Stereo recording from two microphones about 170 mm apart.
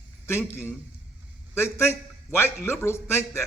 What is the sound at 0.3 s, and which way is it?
A man's voice, 15° left (ahead or behind).